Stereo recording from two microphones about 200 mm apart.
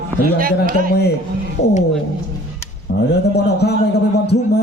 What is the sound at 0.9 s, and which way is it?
Speech, 55° left (ahead or behind).